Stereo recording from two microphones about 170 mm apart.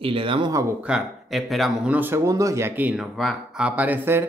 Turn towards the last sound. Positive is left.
turn(degrees=-15)  # may be behind; listen again after turning